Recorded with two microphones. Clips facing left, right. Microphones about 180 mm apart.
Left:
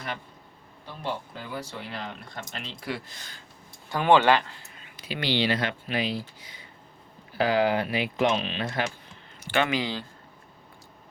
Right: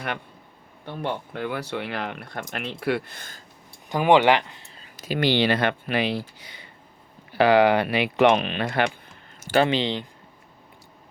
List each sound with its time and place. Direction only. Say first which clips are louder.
1.0 s speech: right 5 dB; 65° right (ahead or behind)
3.8 s speech: right 2 dB; 15° right (ahead or behind)
4.6 s a sound: right 1 dB; 30° right (ahead or behind)
4.9 s speech: right 5 dB; 45° right (ahead or behind); by 8.9 s 65° right (ahead or behind)
9.4 s speech: right 5 dB; 40° right (ahead or behind); by 10.1 s 20° right (ahead or behind)